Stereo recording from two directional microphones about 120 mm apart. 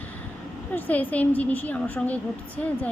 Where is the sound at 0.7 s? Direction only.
15° left (ahead or behind).